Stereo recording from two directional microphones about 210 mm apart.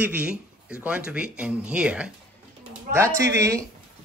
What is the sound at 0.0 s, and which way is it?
Speech, 5° right (ahead or behind).